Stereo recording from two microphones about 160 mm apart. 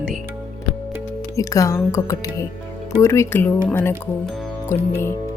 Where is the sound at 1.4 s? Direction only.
20° left (ahead or behind).